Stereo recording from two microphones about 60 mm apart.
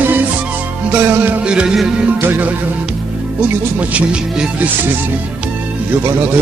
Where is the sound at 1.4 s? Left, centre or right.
Centre.